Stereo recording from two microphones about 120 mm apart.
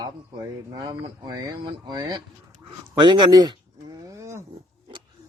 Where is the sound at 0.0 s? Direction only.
35° right (ahead or behind).